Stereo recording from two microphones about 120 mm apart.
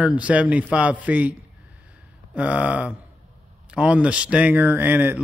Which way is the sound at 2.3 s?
10° right (ahead or behind).